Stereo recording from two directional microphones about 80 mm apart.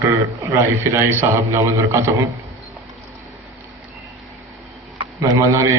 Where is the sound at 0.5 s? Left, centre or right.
Right.